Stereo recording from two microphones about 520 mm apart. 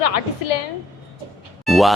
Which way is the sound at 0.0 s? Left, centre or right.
Left.